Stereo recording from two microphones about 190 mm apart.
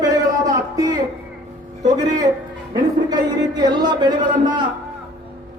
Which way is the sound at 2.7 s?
20° right (ahead or behind).